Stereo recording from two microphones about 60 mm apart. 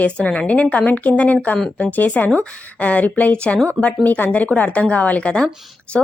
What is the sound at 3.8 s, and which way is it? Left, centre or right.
A woman's voice, left.